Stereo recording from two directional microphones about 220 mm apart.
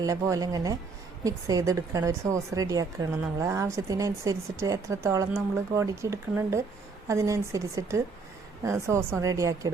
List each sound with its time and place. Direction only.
0.0 s a woman's voice: 15° right (ahead or behind)